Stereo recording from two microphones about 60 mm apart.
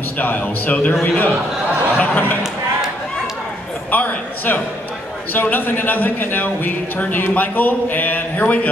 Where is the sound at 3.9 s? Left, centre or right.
Left.